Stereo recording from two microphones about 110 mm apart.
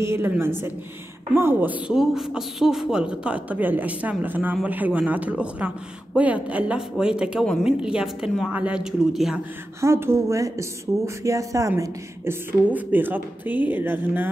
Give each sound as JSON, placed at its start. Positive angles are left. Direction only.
{"t": 0.0, "sound": "a woman's voice", "side_deg": -20}
{"t": 1.9, "sound": "speech", "side_deg": -5}
{"t": 9.1, "sound": "a man's voice", "side_deg": 0}
{"t": 9.8, "sound": "a woman's voice", "side_deg": -25}
{"t": 12.7, "sound": "speech", "side_deg": -15}